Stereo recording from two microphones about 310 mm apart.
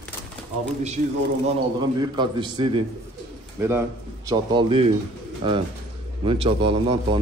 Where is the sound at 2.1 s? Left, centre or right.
Centre.